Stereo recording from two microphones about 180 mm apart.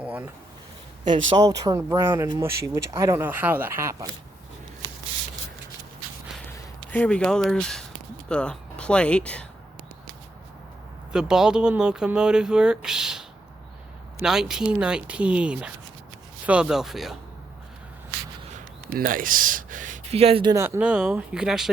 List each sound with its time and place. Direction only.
0.0 s a sound: 10° right (ahead or behind)
1.4 s speech: 20° right (ahead or behind)
6.4 s a sound: 10° left (ahead or behind)
8.3 s speech: 5° left (ahead or behind)
11.1 s speech: 5° right (ahead or behind)
18.9 s speech: 50° right (ahead or behind); by 20.6 s 30° right (ahead or behind)
20.6 s speech: 10° right (ahead or behind)